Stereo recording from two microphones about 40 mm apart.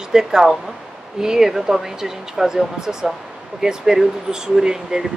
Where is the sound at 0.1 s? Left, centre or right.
Centre.